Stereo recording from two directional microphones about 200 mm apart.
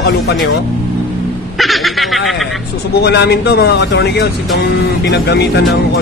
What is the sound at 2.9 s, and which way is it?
Speech, 55° left (ahead or behind).